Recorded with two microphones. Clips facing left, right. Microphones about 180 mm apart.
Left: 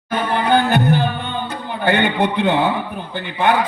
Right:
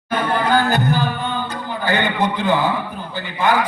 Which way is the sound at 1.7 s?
65° left (ahead or behind).